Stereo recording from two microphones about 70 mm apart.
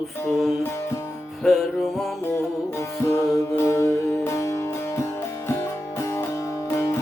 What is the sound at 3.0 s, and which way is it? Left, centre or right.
Music, left.